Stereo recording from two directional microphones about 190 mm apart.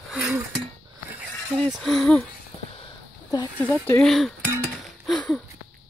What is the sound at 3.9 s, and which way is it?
Speech, centre (ahead or behind).